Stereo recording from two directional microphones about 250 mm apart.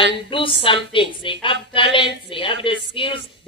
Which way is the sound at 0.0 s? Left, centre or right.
Left.